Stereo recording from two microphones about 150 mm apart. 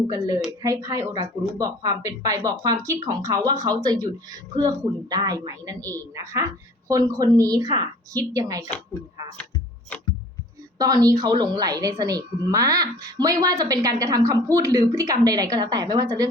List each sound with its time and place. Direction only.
0.1 s a woman's voice: 20° right (ahead or behind)
10.8 s a woman's voice: 25° right (ahead or behind)